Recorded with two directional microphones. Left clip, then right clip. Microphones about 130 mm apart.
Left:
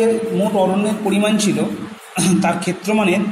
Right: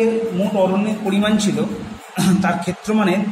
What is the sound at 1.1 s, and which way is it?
A man's voice, 5° left (ahead or behind).